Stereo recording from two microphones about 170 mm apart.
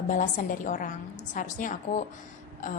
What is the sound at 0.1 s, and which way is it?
Speech, 50° left (ahead or behind).